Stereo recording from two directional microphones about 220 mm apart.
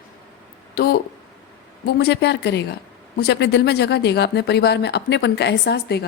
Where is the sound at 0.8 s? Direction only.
45° left (ahead or behind).